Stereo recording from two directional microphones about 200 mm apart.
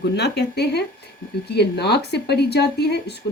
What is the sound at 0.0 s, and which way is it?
Speech, 55° left (ahead or behind).